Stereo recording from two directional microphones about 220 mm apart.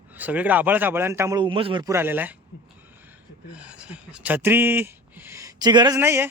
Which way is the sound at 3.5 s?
5° right (ahead or behind).